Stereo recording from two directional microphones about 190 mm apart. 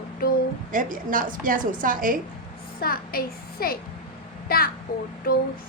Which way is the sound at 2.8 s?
50° left (ahead or behind).